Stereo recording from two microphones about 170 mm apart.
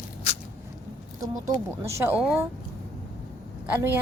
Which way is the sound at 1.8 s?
15° right (ahead or behind).